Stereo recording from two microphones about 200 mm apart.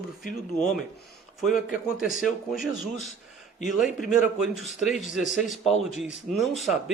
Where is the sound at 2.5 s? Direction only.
Centre (ahead or behind).